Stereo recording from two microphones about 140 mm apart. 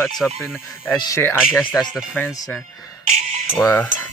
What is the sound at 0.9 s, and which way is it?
Speech, 20° left (ahead or behind).